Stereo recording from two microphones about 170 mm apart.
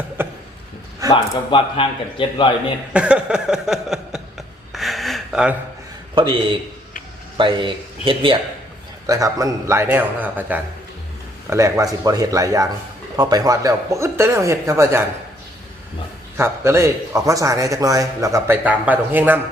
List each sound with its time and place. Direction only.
0.2 s a sound: 15° right (ahead or behind)
1.1 s speech: 30° left (ahead or behind)
2.9 s a sound: 5° right (ahead or behind)
6.1 s a man's voice: 30° right (ahead or behind)
9.0 s a man's voice: 20° right (ahead or behind)
16.4 s a man's voice: 15° right (ahead or behind)